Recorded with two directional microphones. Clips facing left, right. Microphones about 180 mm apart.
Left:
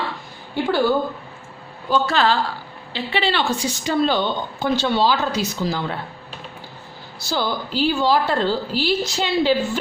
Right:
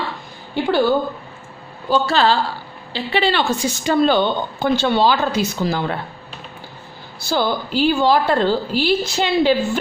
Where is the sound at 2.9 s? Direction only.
40° right (ahead or behind).